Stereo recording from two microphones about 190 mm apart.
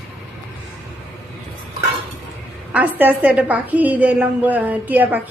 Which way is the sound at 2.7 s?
10° right (ahead or behind).